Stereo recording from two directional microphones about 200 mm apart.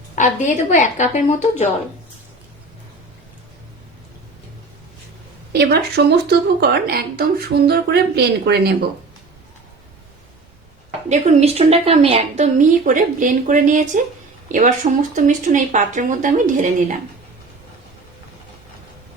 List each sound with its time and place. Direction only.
0.2 s a woman's voice: 40° left (ahead or behind)
5.5 s speech: 55° right (ahead or behind)
11.1 s a woman's voice: 30° right (ahead or behind)